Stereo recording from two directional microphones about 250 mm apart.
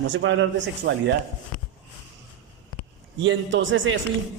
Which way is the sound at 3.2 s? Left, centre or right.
Right.